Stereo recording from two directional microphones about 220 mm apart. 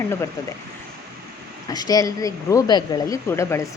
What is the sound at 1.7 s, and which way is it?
Speech, 15° left (ahead or behind).